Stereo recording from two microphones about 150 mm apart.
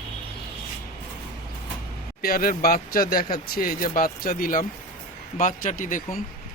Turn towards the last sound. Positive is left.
turn(degrees=60)  # may be behind; listen again after turning